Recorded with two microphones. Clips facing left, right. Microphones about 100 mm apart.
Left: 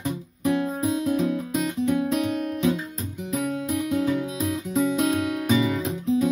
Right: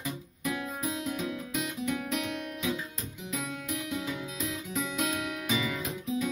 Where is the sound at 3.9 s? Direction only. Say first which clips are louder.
Left 11 dB; 50° left (ahead or behind).